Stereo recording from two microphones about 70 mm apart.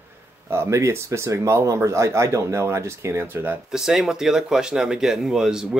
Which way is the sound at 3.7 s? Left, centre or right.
Centre.